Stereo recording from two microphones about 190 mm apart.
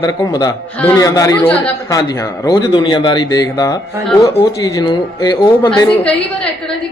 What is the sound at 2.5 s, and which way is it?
A man's voice, 20° left (ahead or behind).